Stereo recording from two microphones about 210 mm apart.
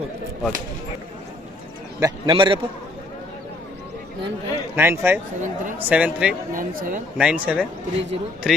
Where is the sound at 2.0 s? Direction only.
20° right (ahead or behind).